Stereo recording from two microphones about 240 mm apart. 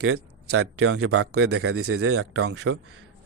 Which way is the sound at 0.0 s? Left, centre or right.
Right.